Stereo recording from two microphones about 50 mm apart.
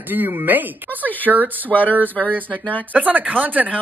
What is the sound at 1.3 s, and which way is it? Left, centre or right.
Speech, centre.